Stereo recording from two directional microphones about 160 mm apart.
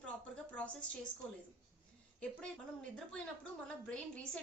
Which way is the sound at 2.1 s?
5° left (ahead or behind).